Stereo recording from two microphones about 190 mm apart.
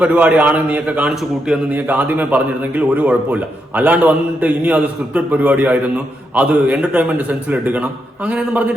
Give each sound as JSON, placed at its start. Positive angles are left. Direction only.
{"t": 0.0, "sound": "a man's voice", "side_deg": -5}